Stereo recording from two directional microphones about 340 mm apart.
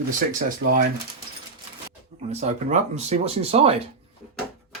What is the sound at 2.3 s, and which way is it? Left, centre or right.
Speech, centre.